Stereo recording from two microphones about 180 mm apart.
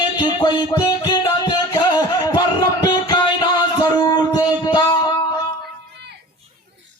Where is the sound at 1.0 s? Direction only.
25° left (ahead or behind).